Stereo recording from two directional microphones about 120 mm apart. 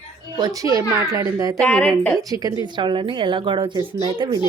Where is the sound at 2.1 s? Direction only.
30° right (ahead or behind).